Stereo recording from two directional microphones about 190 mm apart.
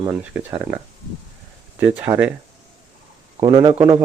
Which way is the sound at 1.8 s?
10° right (ahead or behind).